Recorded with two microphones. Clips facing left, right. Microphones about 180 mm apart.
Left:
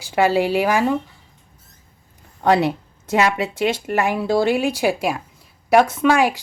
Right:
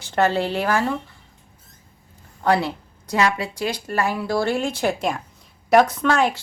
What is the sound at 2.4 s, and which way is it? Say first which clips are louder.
Speech: left 3 dB; 20° left (ahead or behind).